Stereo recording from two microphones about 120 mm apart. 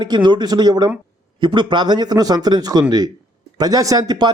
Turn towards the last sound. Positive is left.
turn(degrees=-35)  # may be behind; listen again after turning